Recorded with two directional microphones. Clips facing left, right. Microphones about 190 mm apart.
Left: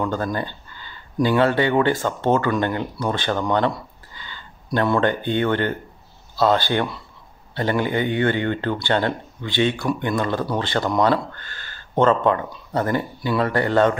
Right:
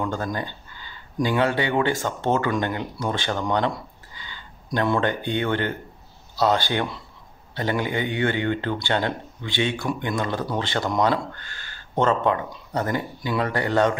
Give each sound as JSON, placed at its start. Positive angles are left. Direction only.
{"t": 0.1, "sound": "speech", "side_deg": -15}
{"t": 4.1, "sound": "a sound", "side_deg": -15}
{"t": 4.7, "sound": "speech", "side_deg": -15}